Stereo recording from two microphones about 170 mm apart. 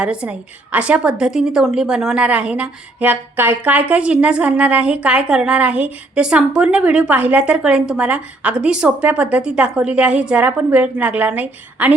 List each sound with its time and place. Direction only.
0.0 s a woman's voice: 5° right (ahead or behind)